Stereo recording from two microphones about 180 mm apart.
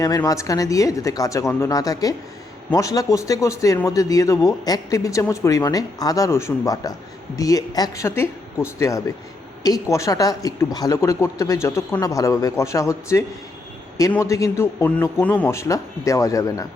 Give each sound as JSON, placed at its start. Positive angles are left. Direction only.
{"t": 0.0, "sound": "a woman's voice", "side_deg": 20}